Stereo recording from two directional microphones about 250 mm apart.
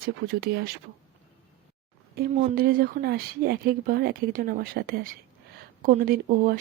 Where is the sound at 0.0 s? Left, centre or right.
Right.